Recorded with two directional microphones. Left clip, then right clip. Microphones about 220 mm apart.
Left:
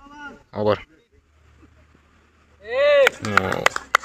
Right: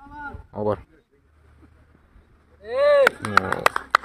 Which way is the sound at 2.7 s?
55° right (ahead or behind).